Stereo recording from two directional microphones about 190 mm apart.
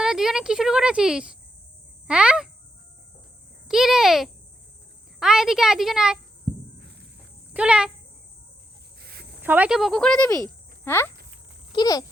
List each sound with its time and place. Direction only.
0.0 s speech: centre (ahead or behind)
3.7 s speech: centre (ahead or behind)
7.5 s speech: 5° right (ahead or behind)
9.0 s a sound: 55° right (ahead or behind)
9.4 s speech: 10° right (ahead or behind)
10.2 s speech: 20° left (ahead or behind)